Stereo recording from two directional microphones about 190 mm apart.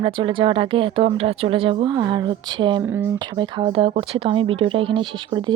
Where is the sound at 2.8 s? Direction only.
10° right (ahead or behind).